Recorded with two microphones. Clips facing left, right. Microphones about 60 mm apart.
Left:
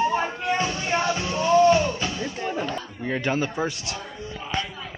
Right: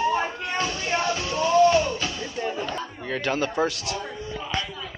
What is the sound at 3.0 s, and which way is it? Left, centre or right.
Speech, centre.